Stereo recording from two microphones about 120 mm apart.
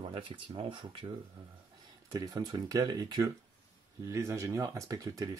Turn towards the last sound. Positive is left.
turn(degrees=-30)  # may be behind; listen again after turning